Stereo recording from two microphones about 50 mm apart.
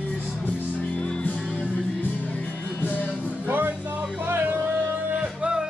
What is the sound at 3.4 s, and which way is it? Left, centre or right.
Music, right.